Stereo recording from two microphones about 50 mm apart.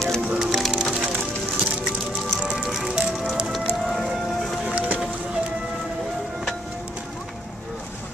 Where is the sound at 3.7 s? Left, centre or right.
Centre.